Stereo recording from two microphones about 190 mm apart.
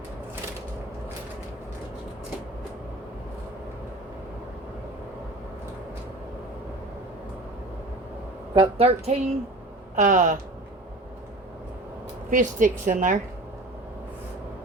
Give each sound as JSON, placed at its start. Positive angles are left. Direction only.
{"t": 8.5, "sound": "a woman's voice", "side_deg": -35}
{"t": 12.3, "sound": "a woman's voice", "side_deg": -45}